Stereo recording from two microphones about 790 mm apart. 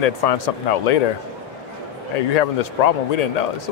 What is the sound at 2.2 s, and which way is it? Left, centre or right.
A man's voice, left.